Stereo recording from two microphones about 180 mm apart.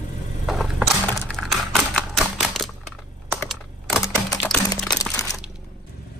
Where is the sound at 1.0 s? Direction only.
5° left (ahead or behind).